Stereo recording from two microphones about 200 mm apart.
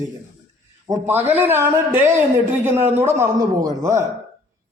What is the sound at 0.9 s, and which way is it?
A man's voice, 10° right (ahead or behind).